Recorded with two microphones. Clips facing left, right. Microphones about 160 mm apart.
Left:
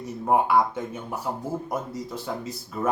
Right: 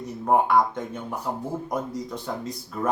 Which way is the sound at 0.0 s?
5° left (ahead or behind).